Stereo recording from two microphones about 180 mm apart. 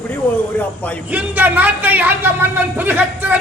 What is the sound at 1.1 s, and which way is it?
A man's voice, 10° right (ahead or behind).